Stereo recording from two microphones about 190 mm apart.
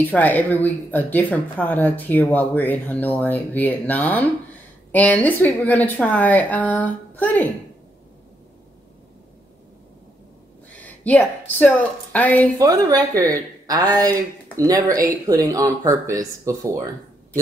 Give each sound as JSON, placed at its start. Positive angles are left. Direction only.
{"t": 0.0, "sound": "speech", "side_deg": 10}
{"t": 10.8, "sound": "a sound", "side_deg": 10}
{"t": 11.5, "sound": "speech", "side_deg": 10}
{"t": 12.5, "sound": "speech", "side_deg": -20}